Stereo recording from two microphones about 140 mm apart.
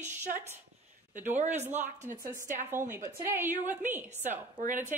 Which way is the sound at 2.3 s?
15° right (ahead or behind).